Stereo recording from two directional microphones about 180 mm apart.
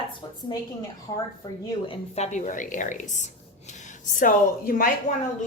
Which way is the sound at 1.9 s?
35° left (ahead or behind).